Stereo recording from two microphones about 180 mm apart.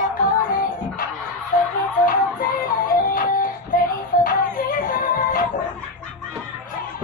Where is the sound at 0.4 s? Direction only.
50° left (ahead or behind).